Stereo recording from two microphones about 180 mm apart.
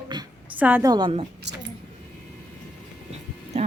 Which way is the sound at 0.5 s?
10° right (ahead or behind).